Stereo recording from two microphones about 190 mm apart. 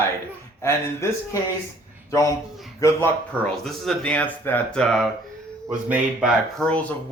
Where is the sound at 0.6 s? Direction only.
15° left (ahead or behind).